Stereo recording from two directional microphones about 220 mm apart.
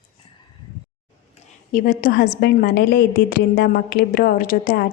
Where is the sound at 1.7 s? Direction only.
40° left (ahead or behind).